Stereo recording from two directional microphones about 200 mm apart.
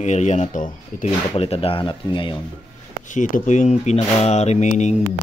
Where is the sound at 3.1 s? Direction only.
40° left (ahead or behind).